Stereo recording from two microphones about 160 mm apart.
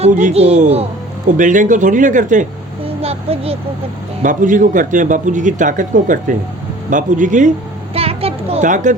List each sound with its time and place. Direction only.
0.0 s speech: 50° right (ahead or behind)
1.3 s speech: 50° right (ahead or behind)
2.8 s a child's voice: 40° right (ahead or behind)
4.2 s speech: 55° right (ahead or behind)
7.9 s a sound: 35° right (ahead or behind)
8.6 s speech: 50° right (ahead or behind)